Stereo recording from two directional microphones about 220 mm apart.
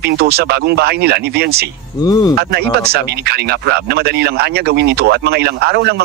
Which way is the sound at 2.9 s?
45° right (ahead or behind).